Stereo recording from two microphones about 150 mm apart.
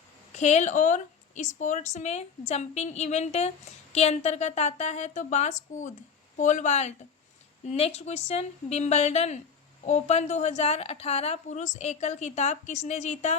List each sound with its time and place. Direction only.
0.3 s a woman's voice: 50° left (ahead or behind)